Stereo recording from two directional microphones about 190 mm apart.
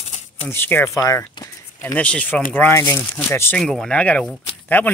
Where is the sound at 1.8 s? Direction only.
5° left (ahead or behind).